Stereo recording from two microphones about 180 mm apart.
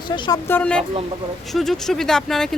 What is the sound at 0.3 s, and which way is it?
Speech, 10° left (ahead or behind).